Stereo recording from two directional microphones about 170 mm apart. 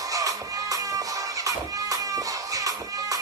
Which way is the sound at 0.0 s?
20° right (ahead or behind).